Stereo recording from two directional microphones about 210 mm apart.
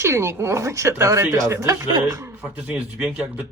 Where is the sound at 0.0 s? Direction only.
10° right (ahead or behind).